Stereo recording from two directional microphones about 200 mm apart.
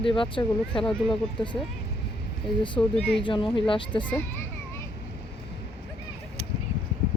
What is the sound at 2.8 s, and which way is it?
A woman's voice, 15° left (ahead or behind).